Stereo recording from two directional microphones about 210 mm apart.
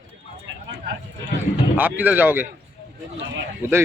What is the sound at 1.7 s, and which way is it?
Speech, 10° right (ahead or behind).